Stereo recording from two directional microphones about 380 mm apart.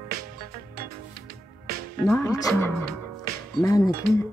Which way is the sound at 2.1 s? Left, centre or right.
Centre.